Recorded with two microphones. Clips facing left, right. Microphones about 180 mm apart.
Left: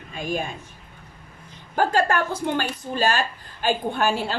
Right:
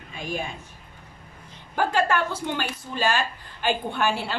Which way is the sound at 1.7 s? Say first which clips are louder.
Left 2 dB; 45° left (ahead or behind).